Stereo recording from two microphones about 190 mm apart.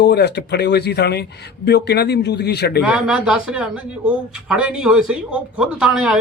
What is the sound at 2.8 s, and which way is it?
A man's voice, 5° right (ahead or behind).